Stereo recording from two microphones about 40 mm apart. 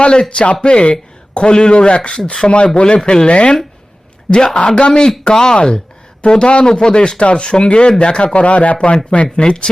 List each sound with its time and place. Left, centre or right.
0.0 s speech: left